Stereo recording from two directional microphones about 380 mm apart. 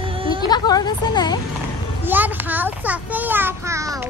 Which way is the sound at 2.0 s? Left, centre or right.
Centre.